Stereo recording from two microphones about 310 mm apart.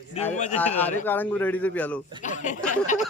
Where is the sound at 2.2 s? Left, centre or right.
Left.